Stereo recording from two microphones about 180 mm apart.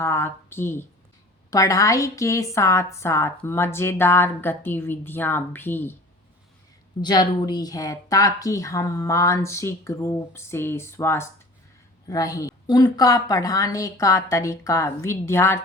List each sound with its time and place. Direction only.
0.0 s a woman's voice: 15° left (ahead or behind)
7.0 s a woman's voice: 25° left (ahead or behind)